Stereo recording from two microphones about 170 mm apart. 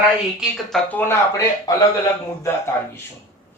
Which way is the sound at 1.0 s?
15° left (ahead or behind).